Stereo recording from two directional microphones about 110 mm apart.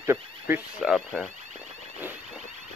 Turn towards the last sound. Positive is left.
turn(degrees=0)  # may be behind; listen again after turning